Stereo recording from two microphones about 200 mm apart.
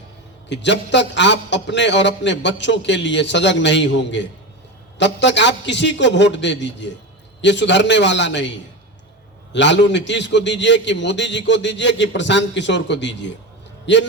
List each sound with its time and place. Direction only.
0.4 s a man's voice: 60° left (ahead or behind)
9.5 s a man's voice: 60° left (ahead or behind)